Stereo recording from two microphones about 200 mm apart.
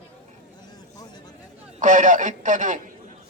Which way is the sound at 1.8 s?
40° right (ahead or behind).